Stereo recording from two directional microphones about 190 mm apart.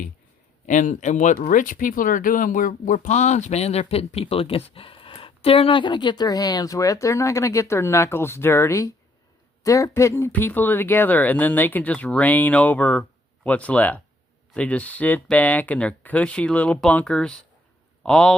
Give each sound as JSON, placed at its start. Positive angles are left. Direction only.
{"t": 0.7, "sound": "speech", "side_deg": 40}